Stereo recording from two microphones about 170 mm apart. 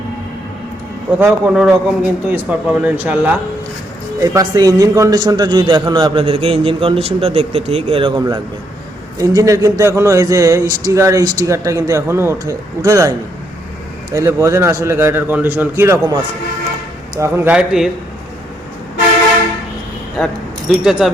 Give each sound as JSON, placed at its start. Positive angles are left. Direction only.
{"t": 1.2, "sound": "a man's voice", "side_deg": -5}
{"t": 17.2, "sound": "a man's voice", "side_deg": -15}
{"t": 20.1, "sound": "speech", "side_deg": 0}